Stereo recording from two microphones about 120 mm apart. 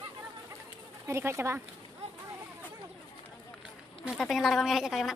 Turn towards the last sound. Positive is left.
turn(degrees=0)  # may be behind; listen again after turning